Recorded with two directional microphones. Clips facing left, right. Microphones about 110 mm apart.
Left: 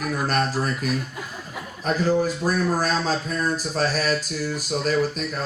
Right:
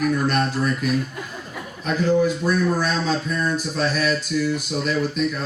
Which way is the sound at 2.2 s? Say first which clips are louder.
Right 3 dB; 40° left (ahead or behind).